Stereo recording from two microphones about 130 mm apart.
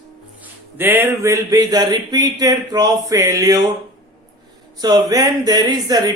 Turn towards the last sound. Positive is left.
turn(degrees=-30)  # may be behind; listen again after turning